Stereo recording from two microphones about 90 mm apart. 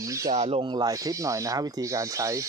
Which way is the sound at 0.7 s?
45° right (ahead or behind).